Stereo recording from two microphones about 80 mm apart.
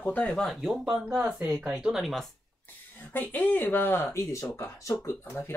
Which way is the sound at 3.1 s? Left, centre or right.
Left.